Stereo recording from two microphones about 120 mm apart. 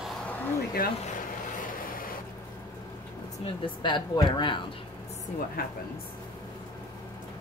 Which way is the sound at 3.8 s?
40° left (ahead or behind).